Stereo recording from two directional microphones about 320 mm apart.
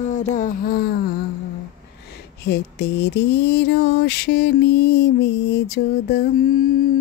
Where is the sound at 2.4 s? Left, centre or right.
Left.